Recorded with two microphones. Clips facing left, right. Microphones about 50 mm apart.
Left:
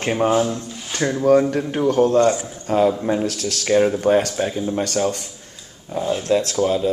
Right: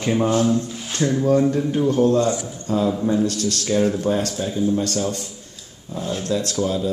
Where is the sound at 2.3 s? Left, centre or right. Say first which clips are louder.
Left 3 dB; left.